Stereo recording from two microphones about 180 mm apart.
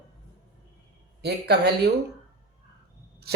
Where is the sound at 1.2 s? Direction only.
65° right (ahead or behind).